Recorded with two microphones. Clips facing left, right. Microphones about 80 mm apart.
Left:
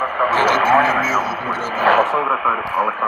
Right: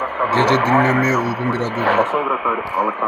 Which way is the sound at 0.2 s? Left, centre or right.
Right.